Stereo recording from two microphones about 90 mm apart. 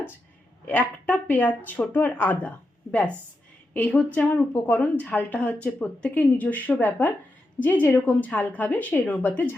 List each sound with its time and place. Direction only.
0.7 s a woman's voice: 15° left (ahead or behind)